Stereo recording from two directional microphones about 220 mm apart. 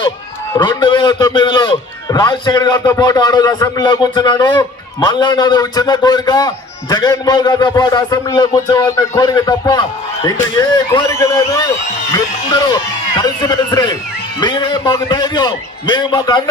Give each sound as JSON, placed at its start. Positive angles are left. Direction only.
{"t": 0.5, "sound": "a man's voice", "side_deg": 20}